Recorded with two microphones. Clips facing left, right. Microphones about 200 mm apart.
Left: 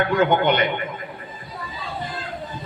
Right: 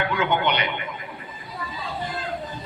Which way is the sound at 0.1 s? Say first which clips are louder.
Left 5 dB; 50° left (ahead or behind).